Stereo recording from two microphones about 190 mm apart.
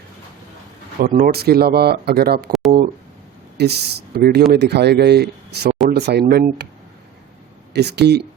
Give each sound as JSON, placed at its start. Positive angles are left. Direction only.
{"t": 1.0, "sound": "speech", "side_deg": -50}
{"t": 2.5, "sound": "speech", "side_deg": 0}
{"t": 3.6, "sound": "speech", "side_deg": -60}
{"t": 7.7, "sound": "speech", "side_deg": -60}